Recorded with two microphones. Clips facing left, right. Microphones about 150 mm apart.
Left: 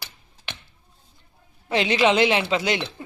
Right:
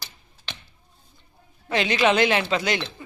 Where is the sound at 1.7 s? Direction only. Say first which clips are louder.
Left 1 dB; 25° left (ahead or behind).